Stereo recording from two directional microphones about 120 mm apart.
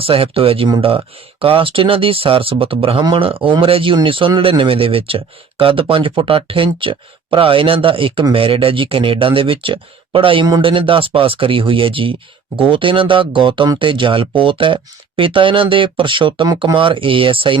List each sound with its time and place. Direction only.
0.0 s speech: 50° right (ahead or behind)